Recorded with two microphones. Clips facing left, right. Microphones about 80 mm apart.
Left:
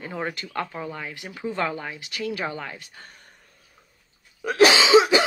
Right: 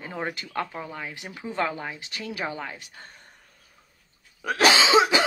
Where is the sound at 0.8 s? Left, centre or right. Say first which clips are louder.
Left 2 dB; centre.